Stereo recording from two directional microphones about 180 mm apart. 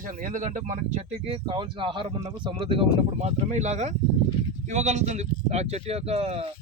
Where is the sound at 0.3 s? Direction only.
45° right (ahead or behind).